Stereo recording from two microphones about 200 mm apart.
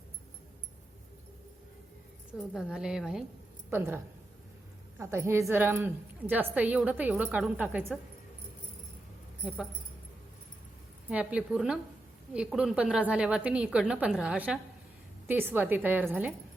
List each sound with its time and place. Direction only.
2.6 s a woman's voice: 5° right (ahead or behind)
11.1 s a woman's voice: 5° right (ahead or behind)